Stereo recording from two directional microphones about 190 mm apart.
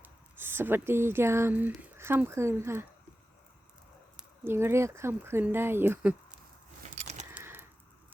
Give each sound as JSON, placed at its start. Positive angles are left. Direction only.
{"t": 0.0, "sound": "speech", "side_deg": -10}
{"t": 4.2, "sound": "speech", "side_deg": -10}
{"t": 6.9, "sound": "keys jangling", "side_deg": -40}
{"t": 7.3, "sound": "keys jangling", "side_deg": -10}